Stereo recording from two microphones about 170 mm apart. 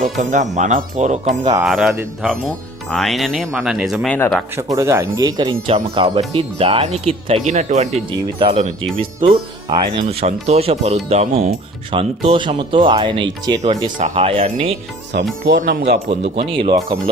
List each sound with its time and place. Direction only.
0.0 s speech: 45° right (ahead or behind)
1.6 s speech: centre (ahead or behind)
2.9 s speech: centre (ahead or behind)
4.5 s speech: 20° right (ahead or behind)
14.0 s speech: 40° right (ahead or behind)
15.1 s speech: 75° right (ahead or behind)
15.4 s speech: 90° right
16.0 s speech: 35° right (ahead or behind)